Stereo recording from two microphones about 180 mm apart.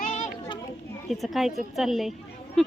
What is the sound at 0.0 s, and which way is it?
Children playing, 45° left (ahead or behind).